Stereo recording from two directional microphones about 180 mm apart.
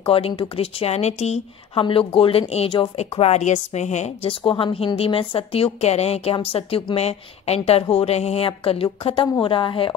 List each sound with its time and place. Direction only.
0.0 s speech: 30° left (ahead or behind)